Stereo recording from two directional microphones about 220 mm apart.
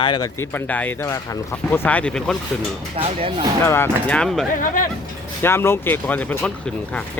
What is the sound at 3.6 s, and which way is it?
Speech, 10° left (ahead or behind).